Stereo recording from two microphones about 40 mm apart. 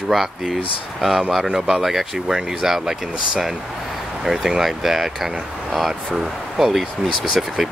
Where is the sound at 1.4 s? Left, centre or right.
Centre.